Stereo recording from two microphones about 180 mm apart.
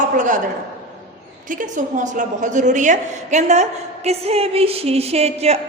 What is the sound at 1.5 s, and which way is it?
A woman's voice, 45° right (ahead or behind).